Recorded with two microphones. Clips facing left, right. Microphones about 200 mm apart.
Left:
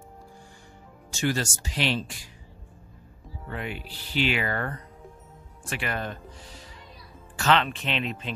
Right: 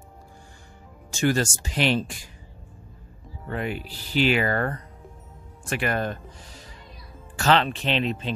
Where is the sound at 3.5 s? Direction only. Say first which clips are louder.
Right 5 dB; 40° right (ahead or behind).